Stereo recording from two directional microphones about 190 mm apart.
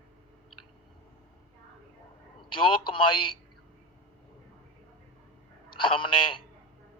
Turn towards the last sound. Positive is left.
turn(degrees=25)  # may be behind; listen again after turning